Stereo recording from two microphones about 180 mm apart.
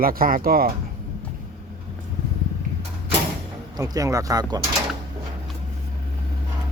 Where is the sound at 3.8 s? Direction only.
20° right (ahead or behind).